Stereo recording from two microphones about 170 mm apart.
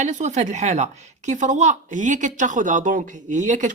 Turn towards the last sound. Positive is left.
turn(degrees=-50)  # may be behind; listen again after turning